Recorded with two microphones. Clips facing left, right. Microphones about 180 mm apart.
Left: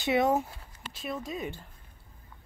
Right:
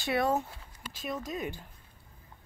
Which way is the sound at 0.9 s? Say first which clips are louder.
Even; centre (ahead or behind).